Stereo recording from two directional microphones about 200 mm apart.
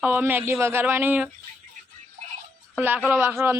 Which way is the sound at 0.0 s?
10° right (ahead or behind).